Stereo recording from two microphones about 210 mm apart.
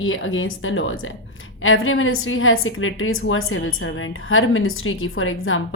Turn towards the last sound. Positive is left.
turn(degrees=75)  # may be behind; listen again after turning